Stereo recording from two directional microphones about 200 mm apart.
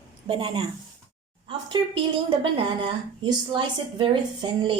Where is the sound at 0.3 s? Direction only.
20° right (ahead or behind).